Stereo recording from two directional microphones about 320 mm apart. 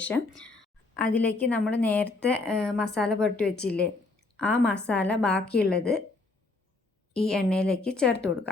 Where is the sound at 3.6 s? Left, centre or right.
Left.